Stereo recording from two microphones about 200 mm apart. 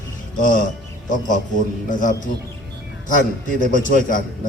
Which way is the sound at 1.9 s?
40° left (ahead or behind).